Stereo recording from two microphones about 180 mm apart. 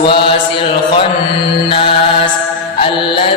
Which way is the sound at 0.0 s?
30° left (ahead or behind).